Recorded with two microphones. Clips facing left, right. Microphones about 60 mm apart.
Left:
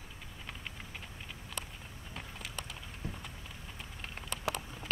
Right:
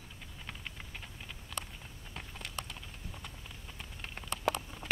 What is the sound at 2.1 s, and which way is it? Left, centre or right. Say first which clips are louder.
Clip-clop: even; centre.